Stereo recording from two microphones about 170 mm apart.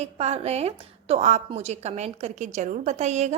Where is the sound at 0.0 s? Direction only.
40° right (ahead or behind).